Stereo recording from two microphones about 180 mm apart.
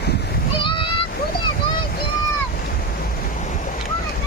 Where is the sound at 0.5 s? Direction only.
30° left (ahead or behind).